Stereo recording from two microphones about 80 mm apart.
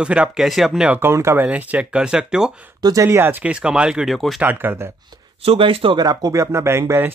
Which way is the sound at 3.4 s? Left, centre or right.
Centre.